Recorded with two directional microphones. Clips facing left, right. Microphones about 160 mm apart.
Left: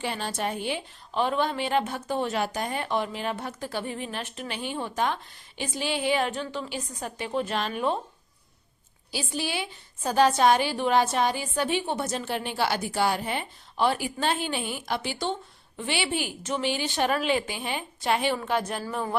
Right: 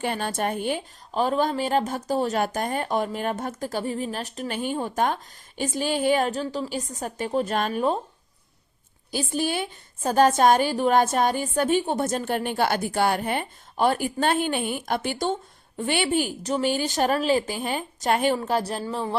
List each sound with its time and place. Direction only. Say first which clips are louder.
0.0 s a woman's voice: right 4 dB; 50° right (ahead or behind)
9.1 s a woman's voice: right 5 dB; 50° right (ahead or behind); by 19.1 s 25° right (ahead or behind)